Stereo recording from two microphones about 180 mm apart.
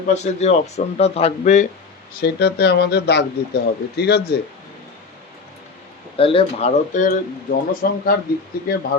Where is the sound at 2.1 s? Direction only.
65° left (ahead or behind).